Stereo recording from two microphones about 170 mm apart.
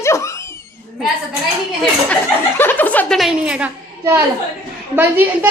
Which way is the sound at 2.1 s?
10° left (ahead or behind).